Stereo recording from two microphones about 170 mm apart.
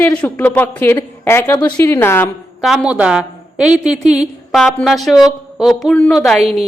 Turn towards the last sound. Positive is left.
turn(degrees=0)  # may be behind; listen again after turning